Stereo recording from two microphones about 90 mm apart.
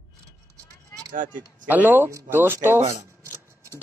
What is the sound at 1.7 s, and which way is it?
Speech, 20° right (ahead or behind).